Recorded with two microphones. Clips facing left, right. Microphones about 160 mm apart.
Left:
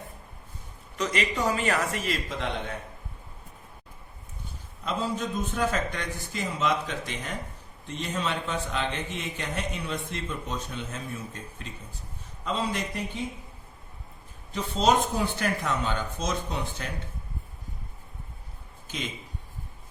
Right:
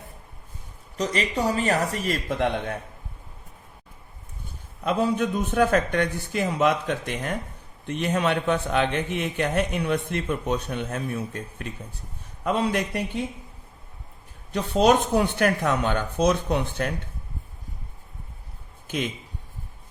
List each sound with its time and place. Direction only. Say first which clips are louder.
0.9 s speech: right 3 dB; 35° right (ahead or behind)
4.8 s a man's voice: right 7 dB; 60° right (ahead or behind)
14.5 s a man's voice: right 5 dB; 65° right (ahead or behind)
18.9 s speech: right 7 dB; 60° right (ahead or behind)